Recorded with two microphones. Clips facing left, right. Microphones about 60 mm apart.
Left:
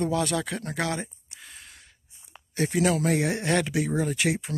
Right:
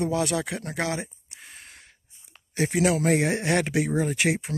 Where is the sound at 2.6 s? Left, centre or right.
Right.